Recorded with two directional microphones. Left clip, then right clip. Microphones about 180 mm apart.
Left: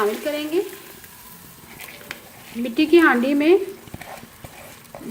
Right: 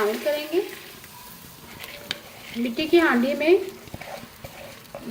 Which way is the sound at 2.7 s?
50° left (ahead or behind).